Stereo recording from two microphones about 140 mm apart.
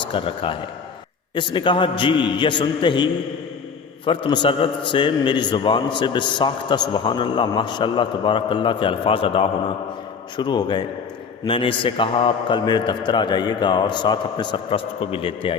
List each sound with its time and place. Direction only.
0.0 s a man's voice: 35° left (ahead or behind)